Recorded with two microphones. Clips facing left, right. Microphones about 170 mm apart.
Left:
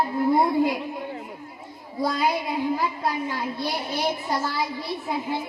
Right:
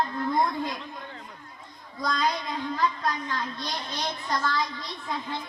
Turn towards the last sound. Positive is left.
turn(degrees=10)  # may be behind; listen again after turning